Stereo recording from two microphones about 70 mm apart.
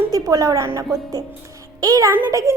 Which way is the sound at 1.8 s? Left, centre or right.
Right.